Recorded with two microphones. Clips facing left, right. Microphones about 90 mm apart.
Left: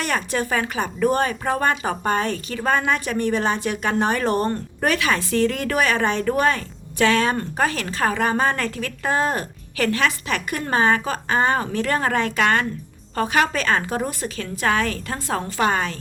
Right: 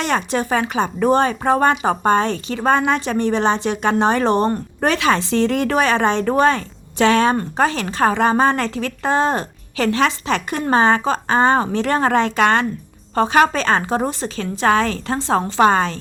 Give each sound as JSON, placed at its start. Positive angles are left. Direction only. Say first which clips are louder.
{"t": 0.0, "sound": "speech", "louder": "right 4 dB", "side_deg": -25}